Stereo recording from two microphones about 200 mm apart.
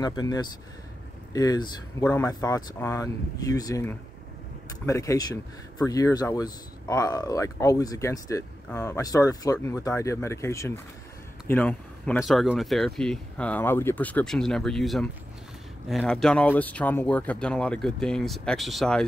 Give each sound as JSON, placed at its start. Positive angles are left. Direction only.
{"t": 0.0, "sound": "speech", "side_deg": 20}